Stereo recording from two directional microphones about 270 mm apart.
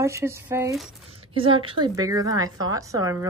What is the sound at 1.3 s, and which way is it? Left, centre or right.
A woman's voice, centre.